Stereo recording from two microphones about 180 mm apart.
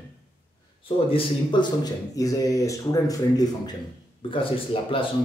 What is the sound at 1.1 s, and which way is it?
Speech, 30° left (ahead or behind).